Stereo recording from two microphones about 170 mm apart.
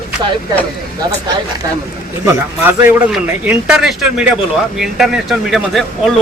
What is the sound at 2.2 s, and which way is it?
A man's voice, 15° right (ahead or behind).